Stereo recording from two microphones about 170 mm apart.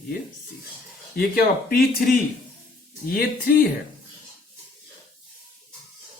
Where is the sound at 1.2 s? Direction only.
60° left (ahead or behind).